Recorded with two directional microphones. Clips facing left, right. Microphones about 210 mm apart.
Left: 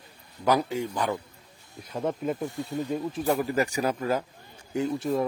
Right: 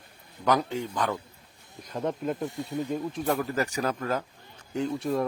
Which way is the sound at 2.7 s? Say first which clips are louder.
Left 1 dB; 15° left (ahead or behind).